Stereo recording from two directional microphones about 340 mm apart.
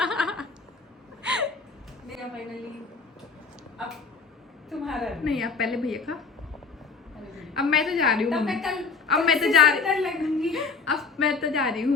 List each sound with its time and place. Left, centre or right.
0.0 s a sound: centre
1.2 s gasp: centre
4.7 s a woman's voice: centre
7.4 s a woman's voice: centre